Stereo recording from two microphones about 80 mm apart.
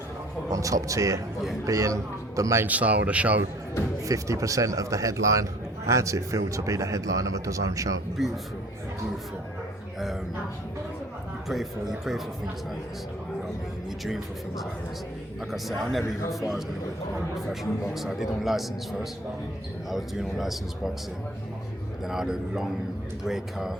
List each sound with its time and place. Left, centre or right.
0.5 s a man's voice: right
2.6 s speech: centre
4.0 s a man's voice: right
11.4 s a man's voice: centre
15.5 s a man's voice: centre
22.0 s a man's voice: centre